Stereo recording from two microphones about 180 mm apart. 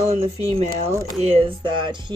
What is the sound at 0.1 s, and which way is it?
Speech, 35° right (ahead or behind).